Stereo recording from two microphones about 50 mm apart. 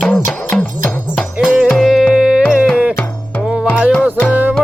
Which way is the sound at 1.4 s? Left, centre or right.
Centre.